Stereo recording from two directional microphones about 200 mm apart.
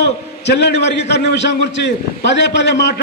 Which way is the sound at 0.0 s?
60° left (ahead or behind).